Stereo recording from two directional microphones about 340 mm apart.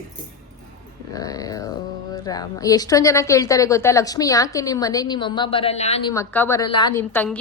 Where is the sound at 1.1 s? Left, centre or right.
Centre.